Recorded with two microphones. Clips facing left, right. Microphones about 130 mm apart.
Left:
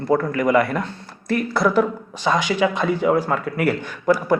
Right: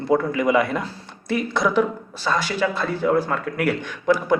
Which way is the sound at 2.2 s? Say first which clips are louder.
Left 3 dB; 15° left (ahead or behind).